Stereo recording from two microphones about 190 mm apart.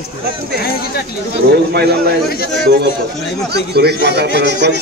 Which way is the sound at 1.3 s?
55° right (ahead or behind).